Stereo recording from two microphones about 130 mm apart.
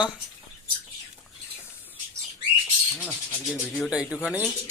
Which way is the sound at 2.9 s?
10° right (ahead or behind).